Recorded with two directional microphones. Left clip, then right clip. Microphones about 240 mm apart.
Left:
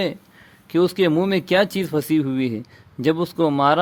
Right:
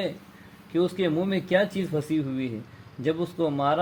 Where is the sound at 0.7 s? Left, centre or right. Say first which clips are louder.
Left 7 dB; left.